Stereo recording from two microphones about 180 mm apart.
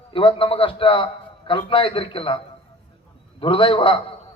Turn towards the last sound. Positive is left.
turn(degrees=30)  # may be behind; listen again after turning